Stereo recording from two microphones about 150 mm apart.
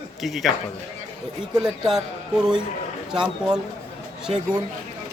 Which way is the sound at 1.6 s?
5° right (ahead or behind).